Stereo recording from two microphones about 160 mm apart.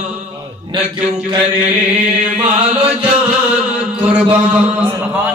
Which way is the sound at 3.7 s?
10° right (ahead or behind).